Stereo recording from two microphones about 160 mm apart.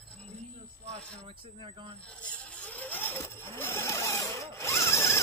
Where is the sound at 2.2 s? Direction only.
10° left (ahead or behind).